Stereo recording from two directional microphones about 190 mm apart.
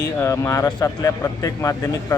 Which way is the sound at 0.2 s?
15° left (ahead or behind).